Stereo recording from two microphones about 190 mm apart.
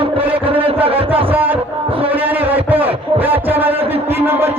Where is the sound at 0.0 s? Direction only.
30° right (ahead or behind).